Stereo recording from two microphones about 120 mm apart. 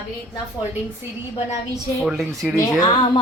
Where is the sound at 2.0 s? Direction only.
Centre (ahead or behind).